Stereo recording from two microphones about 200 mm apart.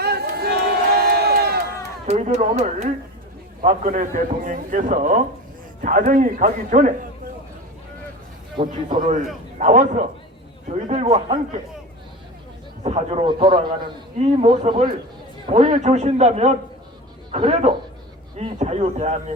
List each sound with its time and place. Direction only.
0.0 s crowd: 55° right (ahead or behind)
2.0 s a man's voice: 35° right (ahead or behind)
8.6 s speech: 25° right (ahead or behind)
9.0 s a man's voice: 40° right (ahead or behind)
12.8 s a man's voice: 30° right (ahead or behind)